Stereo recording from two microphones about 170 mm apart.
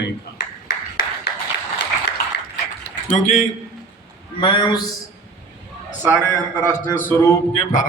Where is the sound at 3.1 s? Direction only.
45° left (ahead or behind).